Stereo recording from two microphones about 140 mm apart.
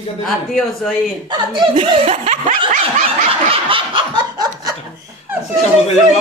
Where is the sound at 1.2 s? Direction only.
35° right (ahead or behind).